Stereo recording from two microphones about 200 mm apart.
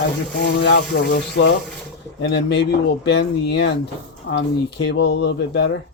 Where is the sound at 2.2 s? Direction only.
60° left (ahead or behind).